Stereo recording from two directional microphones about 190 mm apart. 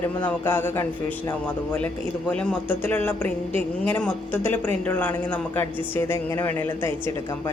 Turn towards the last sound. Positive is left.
turn(degrees=10)  # may be behind; listen again after turning